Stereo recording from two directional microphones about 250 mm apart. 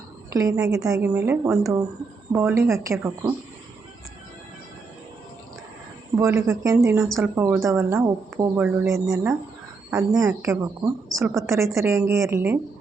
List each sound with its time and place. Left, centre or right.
0.3 s a woman's voice: centre
6.1 s a woman's voice: centre